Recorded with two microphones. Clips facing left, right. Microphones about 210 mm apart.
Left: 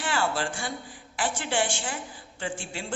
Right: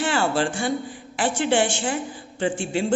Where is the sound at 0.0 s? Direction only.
25° right (ahead or behind).